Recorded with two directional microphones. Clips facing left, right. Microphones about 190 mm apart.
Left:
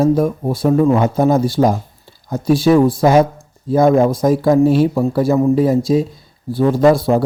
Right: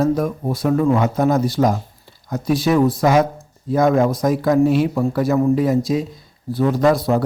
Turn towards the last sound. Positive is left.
turn(degrees=30)  # may be behind; listen again after turning